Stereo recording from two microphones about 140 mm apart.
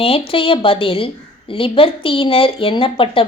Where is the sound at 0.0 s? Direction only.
40° left (ahead or behind).